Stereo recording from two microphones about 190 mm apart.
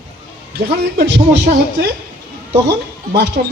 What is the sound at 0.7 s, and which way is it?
Speech, 60° right (ahead or behind).